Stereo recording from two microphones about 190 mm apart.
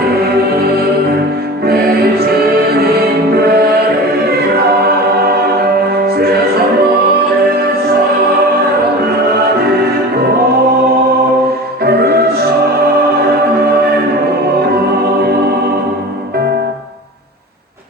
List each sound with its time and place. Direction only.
1.6 s music: 55° right (ahead or behind)
3.3 s music: 55° right (ahead or behind)
6.1 s music: 55° right (ahead or behind)
9.0 s music: 55° right (ahead or behind)
11.9 s music: 55° right (ahead or behind)